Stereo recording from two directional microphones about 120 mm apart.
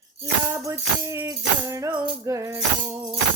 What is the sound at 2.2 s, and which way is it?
Tambourine, 25° right (ahead or behind).